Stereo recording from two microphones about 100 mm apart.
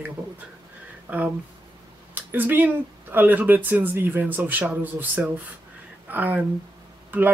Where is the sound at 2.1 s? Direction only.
20° right (ahead or behind).